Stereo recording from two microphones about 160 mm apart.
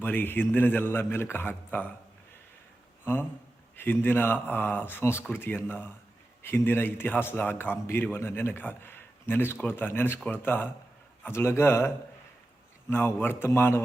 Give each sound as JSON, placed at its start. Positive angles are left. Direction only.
{"t": 0.0, "sound": "a man's voice", "side_deg": 15}
{"t": 3.0, "sound": "a man's voice", "side_deg": 15}
{"t": 12.9, "sound": "a man's voice", "side_deg": 15}